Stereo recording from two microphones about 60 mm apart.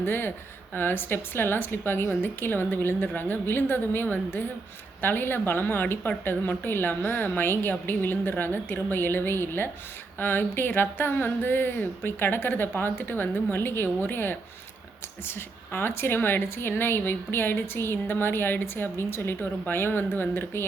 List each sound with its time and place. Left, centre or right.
0.0 s speech: left